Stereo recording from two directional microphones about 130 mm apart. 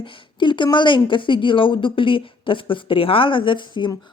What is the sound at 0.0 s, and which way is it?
Speech, 40° left (ahead or behind).